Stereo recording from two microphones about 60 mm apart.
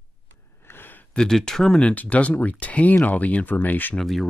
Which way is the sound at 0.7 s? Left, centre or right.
Left.